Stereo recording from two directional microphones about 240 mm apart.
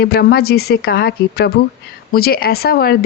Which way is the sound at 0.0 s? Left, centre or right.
Left.